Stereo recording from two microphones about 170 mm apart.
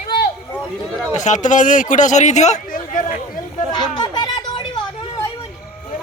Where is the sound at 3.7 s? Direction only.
25° left (ahead or behind).